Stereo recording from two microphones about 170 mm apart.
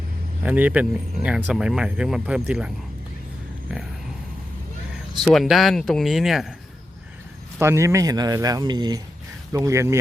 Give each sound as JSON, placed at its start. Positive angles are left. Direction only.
{"t": 0.4, "sound": "speech", "side_deg": -10}
{"t": 5.2, "sound": "speech", "side_deg": 0}
{"t": 7.6, "sound": "speech", "side_deg": -15}